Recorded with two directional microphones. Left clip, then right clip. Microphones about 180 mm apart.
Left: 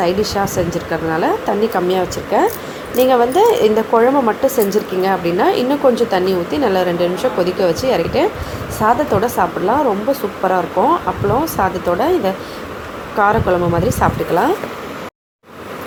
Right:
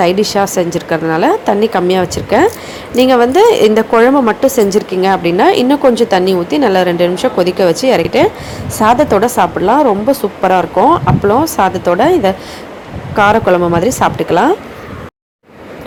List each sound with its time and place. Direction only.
0.0 s a woman's voice: 35° right (ahead or behind)